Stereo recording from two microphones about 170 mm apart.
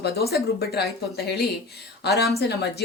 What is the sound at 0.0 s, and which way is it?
A woman's voice, 70° left (ahead or behind).